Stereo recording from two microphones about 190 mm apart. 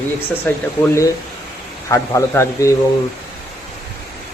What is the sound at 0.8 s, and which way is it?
Speech, 15° left (ahead or behind).